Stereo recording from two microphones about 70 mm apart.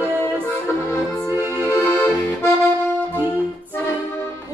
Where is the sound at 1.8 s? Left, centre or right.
Left.